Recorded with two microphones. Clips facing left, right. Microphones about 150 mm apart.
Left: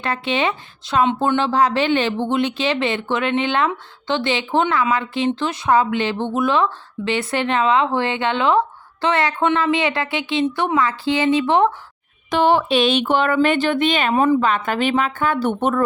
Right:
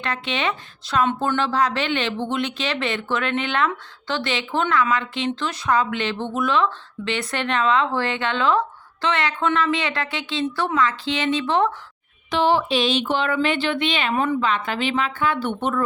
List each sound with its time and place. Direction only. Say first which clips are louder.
0.0 s speech: left 4 dB; 30° left (ahead or behind)
9.4 s speech: left 3 dB; 20° left (ahead or behind)
12.3 s speech: left 3 dB; 55° left (ahead or behind)